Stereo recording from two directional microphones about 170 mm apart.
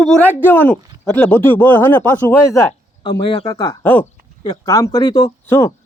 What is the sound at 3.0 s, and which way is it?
Speech, 25° left (ahead or behind).